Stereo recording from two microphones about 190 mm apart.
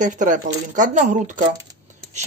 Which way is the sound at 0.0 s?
40° right (ahead or behind).